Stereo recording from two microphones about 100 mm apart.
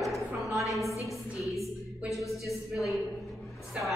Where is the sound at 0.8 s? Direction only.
30° left (ahead or behind).